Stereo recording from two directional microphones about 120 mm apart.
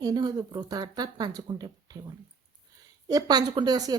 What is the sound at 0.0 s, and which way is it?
A woman's voice, 35° right (ahead or behind).